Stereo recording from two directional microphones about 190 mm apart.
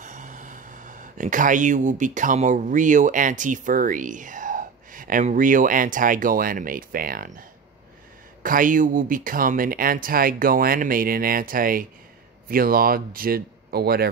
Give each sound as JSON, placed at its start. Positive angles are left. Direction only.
{"t": 0.0, "sound": "speech", "side_deg": -40}